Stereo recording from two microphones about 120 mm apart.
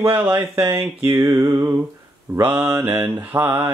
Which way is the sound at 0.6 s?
20° right (ahead or behind).